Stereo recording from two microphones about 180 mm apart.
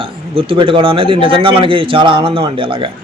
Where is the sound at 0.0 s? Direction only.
30° right (ahead or behind).